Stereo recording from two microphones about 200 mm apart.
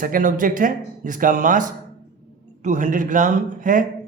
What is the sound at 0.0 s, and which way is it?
A man's voice, 45° right (ahead or behind).